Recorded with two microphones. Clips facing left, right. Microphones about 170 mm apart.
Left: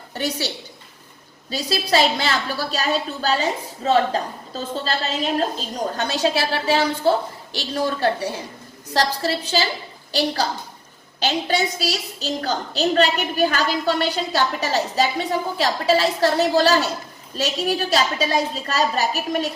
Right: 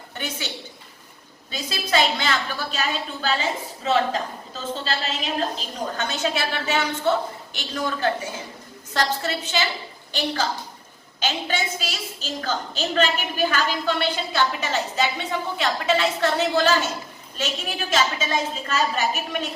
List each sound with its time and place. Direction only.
0.1 s a woman's voice: 35° left (ahead or behind)